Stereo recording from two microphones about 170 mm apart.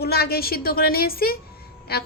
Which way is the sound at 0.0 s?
70° left (ahead or behind).